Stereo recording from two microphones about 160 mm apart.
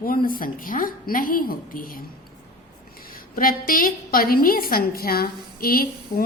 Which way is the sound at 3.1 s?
65° left (ahead or behind).